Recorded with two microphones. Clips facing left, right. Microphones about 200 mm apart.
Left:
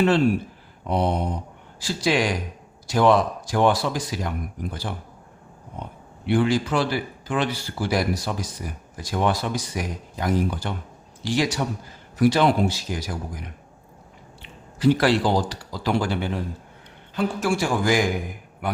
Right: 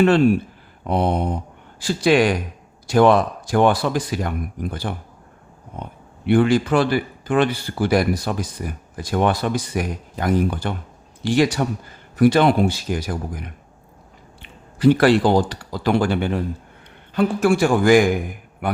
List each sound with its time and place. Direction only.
0.9 s a man's voice: 55° right (ahead or behind)
6.2 s a man's voice: 55° right (ahead or behind)
14.8 s a man's voice: 55° right (ahead or behind)